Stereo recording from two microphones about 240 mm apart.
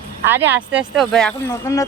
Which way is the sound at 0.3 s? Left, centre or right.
Centre.